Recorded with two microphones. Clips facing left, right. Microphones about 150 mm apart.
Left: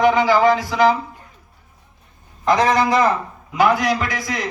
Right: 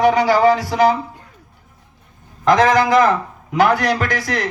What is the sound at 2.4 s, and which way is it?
Speech, 90° right.